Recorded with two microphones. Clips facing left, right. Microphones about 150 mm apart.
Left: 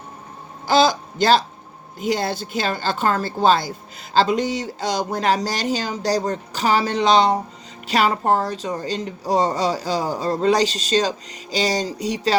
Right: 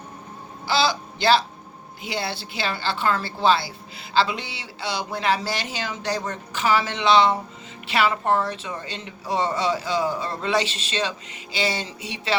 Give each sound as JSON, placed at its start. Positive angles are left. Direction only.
{"t": 0.7, "sound": "a man's voice", "side_deg": 45}